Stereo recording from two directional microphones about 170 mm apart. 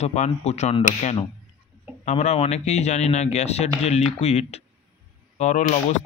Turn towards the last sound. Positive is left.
turn(degrees=45)  # may be behind; listen again after turning